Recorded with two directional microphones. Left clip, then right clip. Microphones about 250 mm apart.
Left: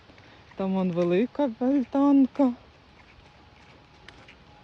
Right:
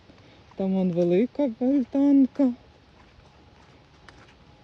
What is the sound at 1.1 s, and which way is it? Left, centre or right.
Speech, left.